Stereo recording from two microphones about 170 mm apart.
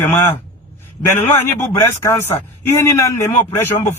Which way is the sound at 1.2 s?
15° left (ahead or behind).